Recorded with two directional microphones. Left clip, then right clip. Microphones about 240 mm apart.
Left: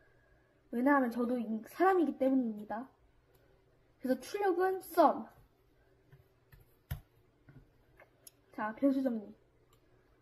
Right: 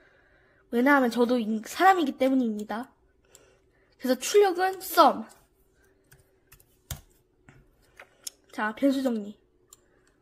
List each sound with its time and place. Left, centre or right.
0.8 s a woman's voice: right
4.1 s a woman's voice: right
8.5 s a woman's voice: right